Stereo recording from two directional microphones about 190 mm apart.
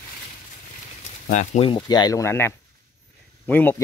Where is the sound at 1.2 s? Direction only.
40° left (ahead or behind).